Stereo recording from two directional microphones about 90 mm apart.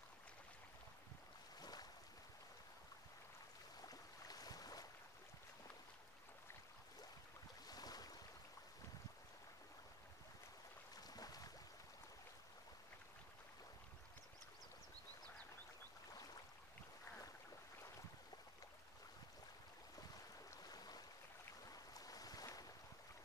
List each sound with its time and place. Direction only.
1.6 s boat: 45° left (ahead or behind)
3.8 s a sound: 45° left (ahead or behind)
7.6 s boat: 45° left (ahead or behind)
11.0 s boat: 45° left (ahead or behind)
20.6 s a sound: 45° left (ahead or behind)
21.6 s boat: 45° left (ahead or behind)